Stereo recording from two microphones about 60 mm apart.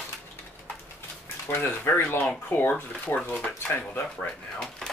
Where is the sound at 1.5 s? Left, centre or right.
Left.